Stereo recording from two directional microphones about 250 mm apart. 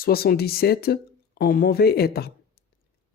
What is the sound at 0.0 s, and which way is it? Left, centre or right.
Speech, left.